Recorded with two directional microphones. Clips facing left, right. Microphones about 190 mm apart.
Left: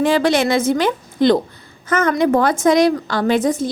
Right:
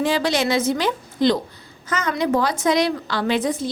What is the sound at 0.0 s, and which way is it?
A woman's voice, 55° left (ahead or behind).